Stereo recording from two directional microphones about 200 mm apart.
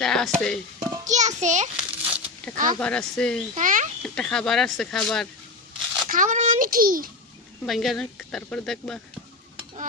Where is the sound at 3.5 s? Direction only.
40° right (ahead or behind).